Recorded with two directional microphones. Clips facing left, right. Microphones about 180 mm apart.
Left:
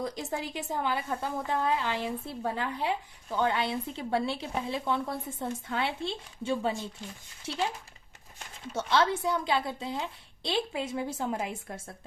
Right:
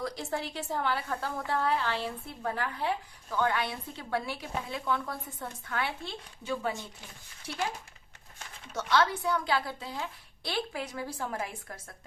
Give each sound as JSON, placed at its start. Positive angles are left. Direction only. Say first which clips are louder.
{"t": 0.0, "sound": "a woman's voice", "louder": "left 1 dB", "side_deg": 20}
{"t": 8.7, "sound": "speech", "louder": "left 1 dB", "side_deg": 25}